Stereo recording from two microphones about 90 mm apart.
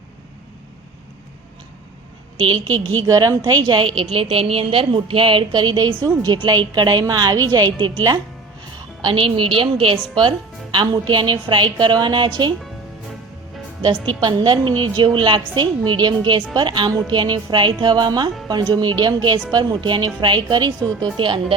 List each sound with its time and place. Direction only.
2.7 s a woman's voice: 20° left (ahead or behind)
3.1 s a woman's voice: 40° right (ahead or behind)
3.4 s a woman's voice: 55° right (ahead or behind)
9.0 s a woman's voice: 70° right (ahead or behind)
13.9 s a woman's voice: 15° left (ahead or behind)
14.2 s a woman's voice: 55° right (ahead or behind)
21.2 s a woman's voice: 70° right (ahead or behind)